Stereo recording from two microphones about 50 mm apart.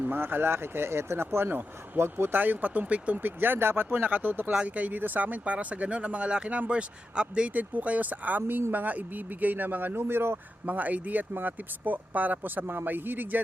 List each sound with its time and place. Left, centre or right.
0.0 s speech: right
2.4 s speech: right
3.2 s speech: right
3.8 s speech: right
4.5 s speech: right
10.7 s speech: right